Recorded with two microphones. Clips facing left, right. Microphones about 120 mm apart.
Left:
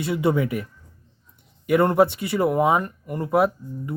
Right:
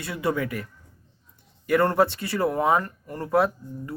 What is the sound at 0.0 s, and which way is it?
Speech, 25° left (ahead or behind).